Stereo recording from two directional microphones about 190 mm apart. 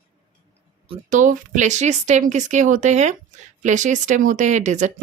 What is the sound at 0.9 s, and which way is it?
Speech, 40° right (ahead or behind).